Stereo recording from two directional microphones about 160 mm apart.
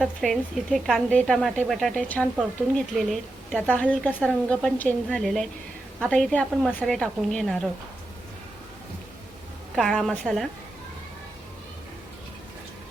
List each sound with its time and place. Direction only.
0.0 s a woman's voice: centre (ahead or behind)
9.7 s a woman's voice: centre (ahead or behind)